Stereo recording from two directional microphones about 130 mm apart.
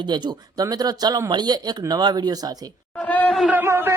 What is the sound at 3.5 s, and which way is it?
Speech, 15° right (ahead or behind).